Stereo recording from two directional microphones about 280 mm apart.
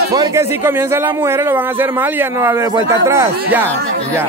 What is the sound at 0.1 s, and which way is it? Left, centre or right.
Speech, centre.